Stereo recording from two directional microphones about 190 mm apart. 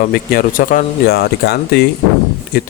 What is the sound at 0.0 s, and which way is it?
A man's voice, 50° left (ahead or behind).